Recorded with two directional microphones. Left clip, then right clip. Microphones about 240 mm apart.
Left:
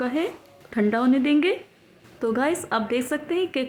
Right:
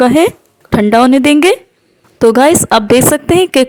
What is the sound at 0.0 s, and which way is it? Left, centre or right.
A woman's voice, right.